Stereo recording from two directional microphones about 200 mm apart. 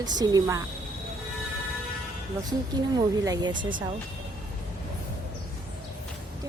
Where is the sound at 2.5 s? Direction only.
20° right (ahead or behind).